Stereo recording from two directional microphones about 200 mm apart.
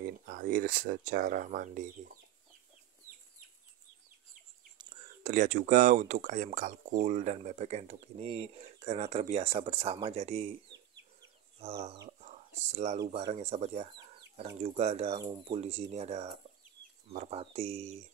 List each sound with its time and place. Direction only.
0.0 s speech: 45° right (ahead or behind)
5.2 s speech: 40° right (ahead or behind)
12.1 s whispering: 35° right (ahead or behind)
13.3 s speech: 35° right (ahead or behind)
13.9 s chicken: 25° right (ahead or behind)
14.6 s speech: 35° right (ahead or behind)
15.1 s speech: 20° right (ahead or behind)